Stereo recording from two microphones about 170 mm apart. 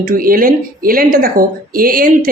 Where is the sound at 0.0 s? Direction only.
55° right (ahead or behind).